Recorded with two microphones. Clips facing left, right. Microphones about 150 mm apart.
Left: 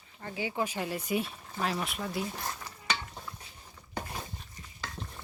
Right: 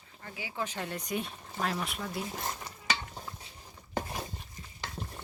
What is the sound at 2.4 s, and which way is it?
Stir, 20° right (ahead or behind).